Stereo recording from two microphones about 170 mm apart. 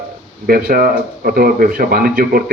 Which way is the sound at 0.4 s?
55° right (ahead or behind).